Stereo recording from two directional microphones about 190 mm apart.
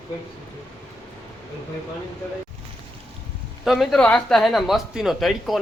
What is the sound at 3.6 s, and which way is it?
Speech, centre (ahead or behind).